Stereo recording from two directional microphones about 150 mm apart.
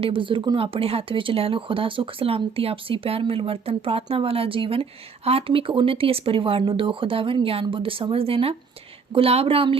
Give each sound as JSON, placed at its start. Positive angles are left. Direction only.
{"t": 0.0, "sound": "speech", "side_deg": -35}